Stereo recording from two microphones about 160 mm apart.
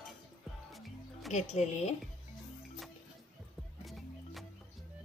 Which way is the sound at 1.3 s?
45° left (ahead or behind).